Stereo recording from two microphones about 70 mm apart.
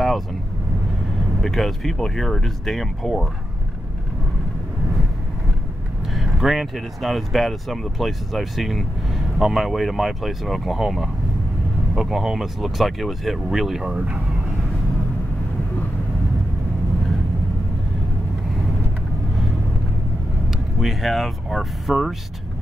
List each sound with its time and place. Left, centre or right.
1.4 s speech: centre
6.1 s speech: centre
13.9 s speech: centre
20.8 s speech: centre